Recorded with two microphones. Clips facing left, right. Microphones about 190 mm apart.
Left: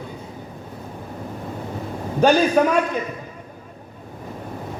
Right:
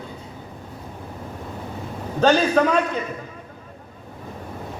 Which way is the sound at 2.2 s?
10° left (ahead or behind).